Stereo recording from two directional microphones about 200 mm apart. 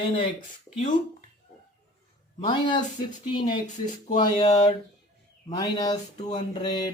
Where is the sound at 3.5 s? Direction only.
40° left (ahead or behind).